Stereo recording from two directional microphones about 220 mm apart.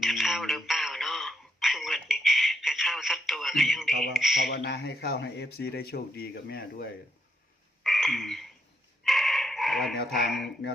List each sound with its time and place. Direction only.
0.0 s radio: centre (ahead or behind)
4.1 s speech: centre (ahead or behind)
4.4 s speech: 50° left (ahead or behind)
7.9 s a sound: centre (ahead or behind)
9.0 s chicken: centre (ahead or behind)
9.9 s speech: 50° left (ahead or behind)